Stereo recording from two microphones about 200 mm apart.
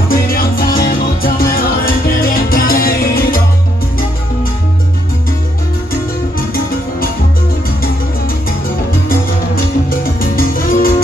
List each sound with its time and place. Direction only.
0.1 s music: 45° left (ahead or behind)
9.8 s music: 45° left (ahead or behind)